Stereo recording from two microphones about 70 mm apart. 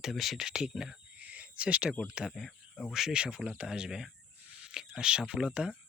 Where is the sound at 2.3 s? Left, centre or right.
Centre.